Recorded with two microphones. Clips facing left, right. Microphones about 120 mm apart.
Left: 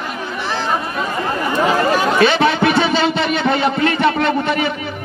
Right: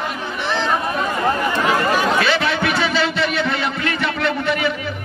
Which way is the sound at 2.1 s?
25° left (ahead or behind).